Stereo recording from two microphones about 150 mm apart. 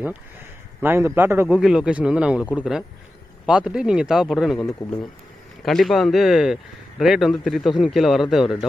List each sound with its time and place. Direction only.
0.7 s speech: 15° right (ahead or behind)
1.6 s speech: 5° right (ahead or behind)